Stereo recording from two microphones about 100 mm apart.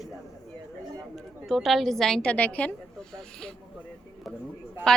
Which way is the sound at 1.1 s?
Centre (ahead or behind).